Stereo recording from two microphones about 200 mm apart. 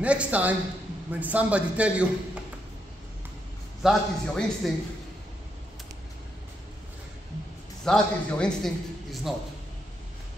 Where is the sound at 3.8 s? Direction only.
Centre (ahead or behind).